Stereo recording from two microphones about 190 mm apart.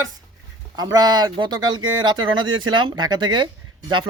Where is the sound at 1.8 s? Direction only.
90° right.